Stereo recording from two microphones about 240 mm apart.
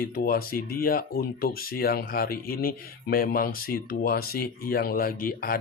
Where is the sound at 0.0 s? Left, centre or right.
Left.